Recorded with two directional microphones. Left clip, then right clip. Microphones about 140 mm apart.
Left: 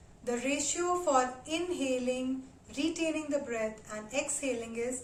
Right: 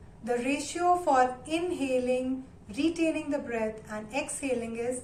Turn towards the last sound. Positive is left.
turn(degrees=15)  # may be behind; listen again after turning